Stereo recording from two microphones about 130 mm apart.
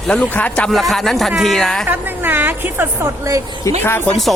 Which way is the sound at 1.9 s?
15° right (ahead or behind).